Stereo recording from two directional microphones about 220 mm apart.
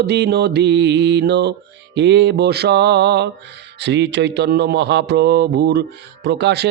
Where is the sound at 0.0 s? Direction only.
50° right (ahead or behind).